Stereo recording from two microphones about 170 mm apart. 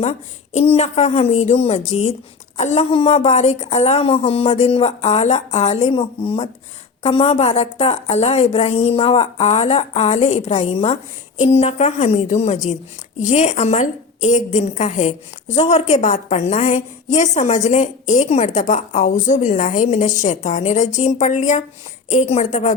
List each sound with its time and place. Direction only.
0.0 s a woman's voice: 40° left (ahead or behind)